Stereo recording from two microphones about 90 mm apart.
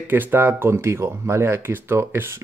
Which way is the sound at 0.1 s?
20° right (ahead or behind).